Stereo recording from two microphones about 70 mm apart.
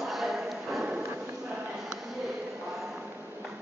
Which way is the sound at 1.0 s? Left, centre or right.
Right.